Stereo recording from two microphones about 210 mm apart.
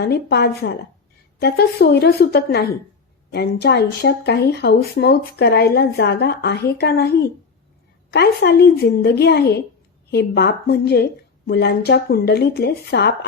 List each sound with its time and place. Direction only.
0.0 s speech: 50° left (ahead or behind)